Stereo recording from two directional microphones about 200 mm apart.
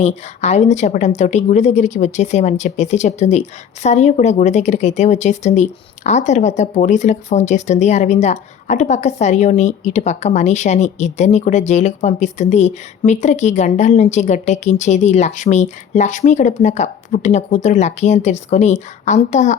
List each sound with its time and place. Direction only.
0.0 s speech: 35° left (ahead or behind)